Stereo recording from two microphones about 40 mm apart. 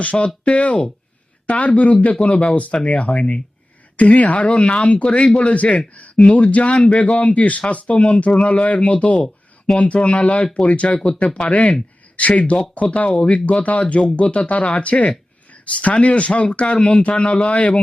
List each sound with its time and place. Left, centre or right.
0.0 s speech: left
11.2 s speech: left
11.4 s speech: left